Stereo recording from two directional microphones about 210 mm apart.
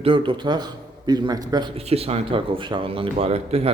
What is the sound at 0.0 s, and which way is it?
A man's voice, 25° right (ahead or behind).